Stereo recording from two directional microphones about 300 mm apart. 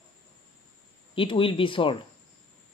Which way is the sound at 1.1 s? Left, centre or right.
Centre.